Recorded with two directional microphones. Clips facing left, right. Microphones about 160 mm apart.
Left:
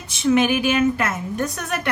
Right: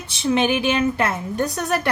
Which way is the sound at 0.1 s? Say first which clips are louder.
Left 2 dB; 30° right (ahead or behind).